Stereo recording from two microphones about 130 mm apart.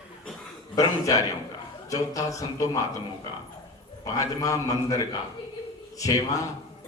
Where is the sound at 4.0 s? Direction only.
25° left (ahead or behind).